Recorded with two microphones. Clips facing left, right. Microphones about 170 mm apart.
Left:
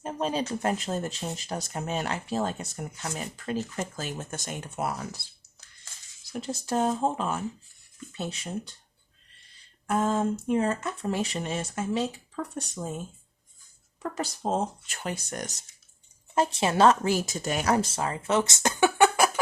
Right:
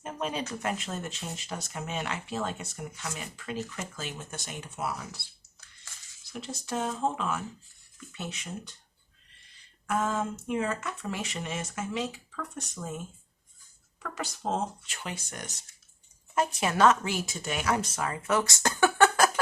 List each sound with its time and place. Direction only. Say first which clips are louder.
0.0 s speech: left 4 dB; 35° left (ahead or behind); by 5.2 s 50° left (ahead or behind)
6.4 s speech: left 6 dB; 35° left (ahead or behind)
9.8 s speech: left 4 dB; 30° left (ahead or behind)
14.0 s speech: left 4 dB; 35° left (ahead or behind)
16.3 s speech: left 3 dB; 30° left (ahead or behind)